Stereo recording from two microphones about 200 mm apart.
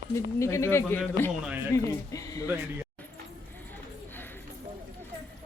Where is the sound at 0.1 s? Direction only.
15° left (ahead or behind).